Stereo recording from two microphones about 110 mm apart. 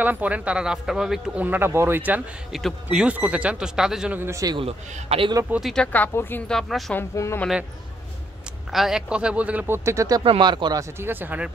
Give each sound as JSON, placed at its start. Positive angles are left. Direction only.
{"t": 0.0, "sound": "speech", "side_deg": -15}
{"t": 1.4, "sound": "speech", "side_deg": -20}
{"t": 2.5, "sound": "speech", "side_deg": -5}
{"t": 4.1, "sound": "a man's voice", "side_deg": -20}
{"t": 4.6, "sound": "a man's voice", "side_deg": -75}
{"t": 5.6, "sound": "speech", "side_deg": 5}
{"t": 5.9, "sound": "speech", "side_deg": 15}
{"t": 6.4, "sound": "speech", "side_deg": 5}
{"t": 7.0, "sound": "speech", "side_deg": 20}
{"t": 8.7, "sound": "speech", "side_deg": -5}
{"t": 9.8, "sound": "speech", "side_deg": -30}
{"t": 10.4, "sound": "speech", "side_deg": -40}
{"t": 10.8, "sound": "speech", "side_deg": -20}